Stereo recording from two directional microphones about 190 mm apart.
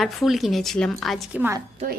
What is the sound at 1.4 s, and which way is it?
Speech, 15° right (ahead or behind).